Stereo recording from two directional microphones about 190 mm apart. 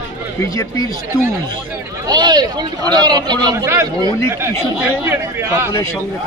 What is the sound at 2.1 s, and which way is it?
A man's voice, 20° right (ahead or behind).